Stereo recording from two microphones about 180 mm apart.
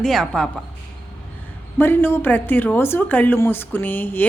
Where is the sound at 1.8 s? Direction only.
10° left (ahead or behind).